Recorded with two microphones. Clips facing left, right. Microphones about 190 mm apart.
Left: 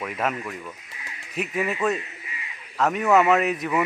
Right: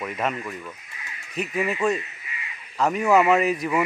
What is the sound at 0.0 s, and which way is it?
A man's voice, centre (ahead or behind).